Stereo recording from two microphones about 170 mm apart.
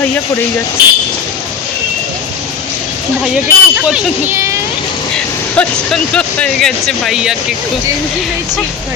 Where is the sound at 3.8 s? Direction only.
5° right (ahead or behind).